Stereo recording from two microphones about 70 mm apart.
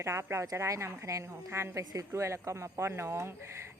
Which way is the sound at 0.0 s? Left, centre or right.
Right.